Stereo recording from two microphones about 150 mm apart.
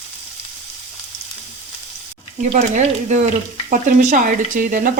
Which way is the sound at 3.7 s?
65° right (ahead or behind).